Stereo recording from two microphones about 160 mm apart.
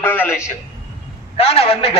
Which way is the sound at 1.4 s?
40° left (ahead or behind).